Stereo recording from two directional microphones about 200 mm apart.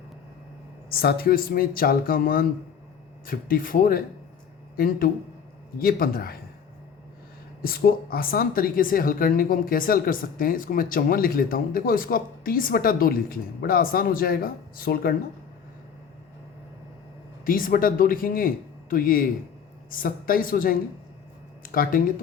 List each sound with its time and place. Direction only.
0.9 s a woman's voice: 50° left (ahead or behind)
7.6 s a woman's voice: 45° left (ahead or behind)
17.4 s a woman's voice: 45° left (ahead or behind)